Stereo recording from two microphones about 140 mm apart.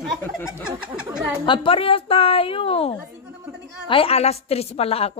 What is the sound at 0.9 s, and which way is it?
Speech, 5° right (ahead or behind).